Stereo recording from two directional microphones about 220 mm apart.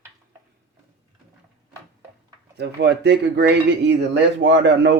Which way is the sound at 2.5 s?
50° right (ahead or behind).